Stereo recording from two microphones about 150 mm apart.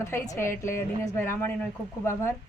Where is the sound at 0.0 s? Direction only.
20° left (ahead or behind).